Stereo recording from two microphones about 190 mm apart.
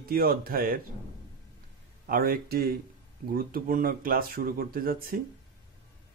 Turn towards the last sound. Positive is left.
turn(degrees=-50)  # may be behind; listen again after turning